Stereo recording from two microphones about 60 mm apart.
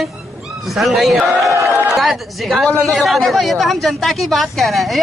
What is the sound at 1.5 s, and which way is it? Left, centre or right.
Speech, right.